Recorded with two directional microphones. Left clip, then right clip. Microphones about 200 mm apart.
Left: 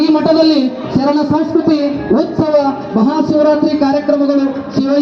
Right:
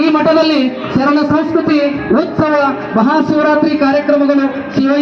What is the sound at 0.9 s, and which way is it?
A man's voice, 55° right (ahead or behind).